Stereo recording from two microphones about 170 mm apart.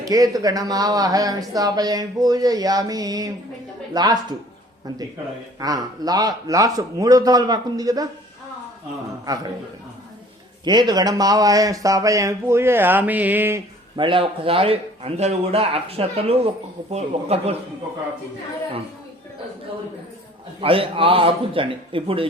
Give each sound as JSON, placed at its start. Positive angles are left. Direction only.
{"t": 0.0, "sound": "speech", "side_deg": -20}
{"t": 5.5, "sound": "speech", "side_deg": -20}
{"t": 9.2, "sound": "speech", "side_deg": -20}
{"t": 10.7, "sound": "speech", "side_deg": -25}
{"t": 13.9, "sound": "a man's voice", "side_deg": -30}
{"t": 20.6, "sound": "a man's voice", "side_deg": -35}